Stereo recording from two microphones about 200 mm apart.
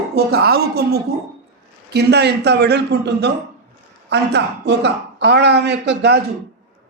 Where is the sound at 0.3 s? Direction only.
50° right (ahead or behind).